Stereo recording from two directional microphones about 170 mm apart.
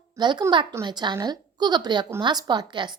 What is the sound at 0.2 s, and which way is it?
A woman's voice, 25° right (ahead or behind).